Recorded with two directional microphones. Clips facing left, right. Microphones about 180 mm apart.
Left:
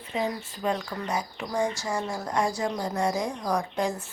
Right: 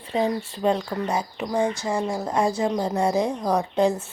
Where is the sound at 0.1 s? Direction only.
30° right (ahead or behind).